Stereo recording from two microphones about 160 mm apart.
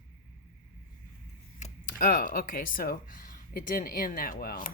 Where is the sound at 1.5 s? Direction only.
50° left (ahead or behind).